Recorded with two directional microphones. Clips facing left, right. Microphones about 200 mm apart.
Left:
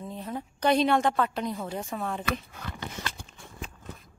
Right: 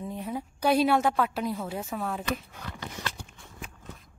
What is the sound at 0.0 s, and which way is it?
A woman's voice, 10° right (ahead or behind).